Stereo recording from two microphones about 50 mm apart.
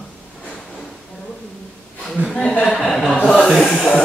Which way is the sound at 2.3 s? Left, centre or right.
Left.